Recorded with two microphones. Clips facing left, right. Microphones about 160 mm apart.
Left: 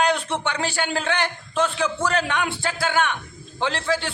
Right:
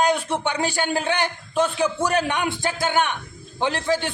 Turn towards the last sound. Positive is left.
turn(degrees=-15)  # may be behind; listen again after turning